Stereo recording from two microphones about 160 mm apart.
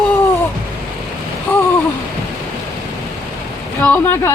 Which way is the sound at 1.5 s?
15° left (ahead or behind).